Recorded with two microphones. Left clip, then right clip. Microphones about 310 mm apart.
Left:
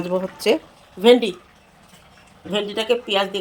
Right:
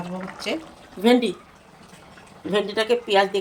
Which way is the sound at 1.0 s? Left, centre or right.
Centre.